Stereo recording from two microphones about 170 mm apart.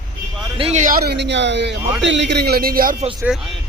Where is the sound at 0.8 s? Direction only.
60° right (ahead or behind).